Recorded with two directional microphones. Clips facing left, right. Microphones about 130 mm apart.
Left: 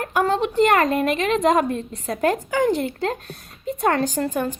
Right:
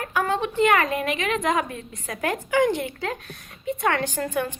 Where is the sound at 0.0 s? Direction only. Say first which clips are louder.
Left 4 dB; 45° left (ahead or behind).